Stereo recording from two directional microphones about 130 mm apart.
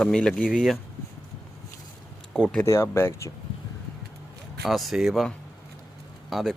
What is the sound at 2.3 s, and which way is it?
Speech, 5° left (ahead or behind).